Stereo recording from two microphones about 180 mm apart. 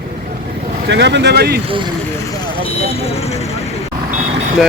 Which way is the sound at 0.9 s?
75° right (ahead or behind).